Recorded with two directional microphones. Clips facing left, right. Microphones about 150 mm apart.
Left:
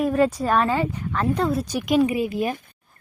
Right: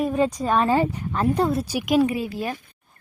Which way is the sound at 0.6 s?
35° right (ahead or behind).